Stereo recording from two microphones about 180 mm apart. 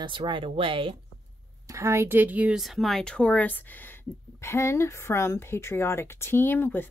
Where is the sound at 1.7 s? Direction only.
15° right (ahead or behind).